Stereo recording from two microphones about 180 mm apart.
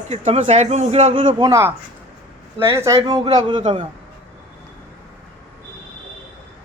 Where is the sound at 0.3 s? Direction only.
40° right (ahead or behind).